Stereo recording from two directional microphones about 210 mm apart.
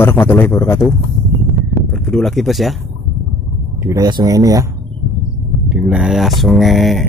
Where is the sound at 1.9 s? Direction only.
Centre (ahead or behind).